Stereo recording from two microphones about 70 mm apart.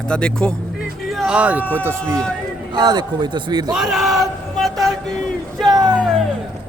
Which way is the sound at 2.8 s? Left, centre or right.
Right.